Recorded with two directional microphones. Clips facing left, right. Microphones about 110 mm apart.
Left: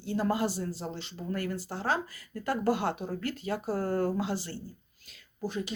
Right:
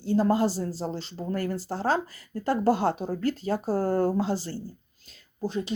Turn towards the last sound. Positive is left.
turn(degrees=-30)  # may be behind; listen again after turning